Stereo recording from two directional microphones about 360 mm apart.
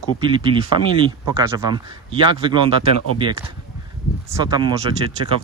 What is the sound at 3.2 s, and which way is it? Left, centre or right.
Speech, centre.